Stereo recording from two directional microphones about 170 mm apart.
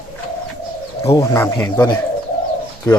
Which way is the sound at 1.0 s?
15° left (ahead or behind).